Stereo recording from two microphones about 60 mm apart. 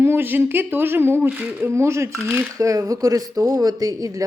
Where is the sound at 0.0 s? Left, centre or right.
Right.